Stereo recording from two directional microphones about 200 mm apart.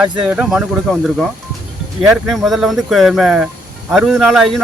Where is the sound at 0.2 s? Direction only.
5° right (ahead or behind).